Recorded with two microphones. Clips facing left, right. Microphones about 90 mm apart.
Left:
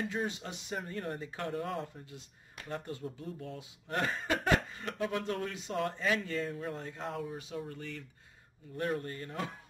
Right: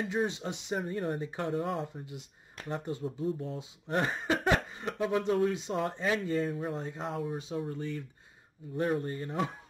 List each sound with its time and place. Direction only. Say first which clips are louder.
0.0 s speech: right 4 dB; 20° right (ahead or behind)
1.5 s speech: right 4 dB; 10° right (ahead or behind)
2.0 s speech: right 5 dB; 20° right (ahead or behind)
6.4 s speech: right 4 dB; 10° right (ahead or behind)
6.8 s speech: right 3 dB; 20° right (ahead or behind)
9.0 s speech: right 6 dB; 20° right (ahead or behind)